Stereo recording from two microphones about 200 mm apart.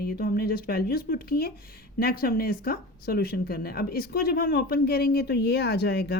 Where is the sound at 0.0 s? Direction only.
50° left (ahead or behind).